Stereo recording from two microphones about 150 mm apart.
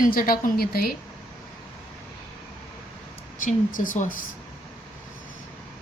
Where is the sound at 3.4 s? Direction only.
65° left (ahead or behind).